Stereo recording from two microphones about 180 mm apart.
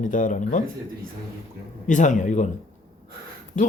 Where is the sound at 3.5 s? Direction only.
45° left (ahead or behind).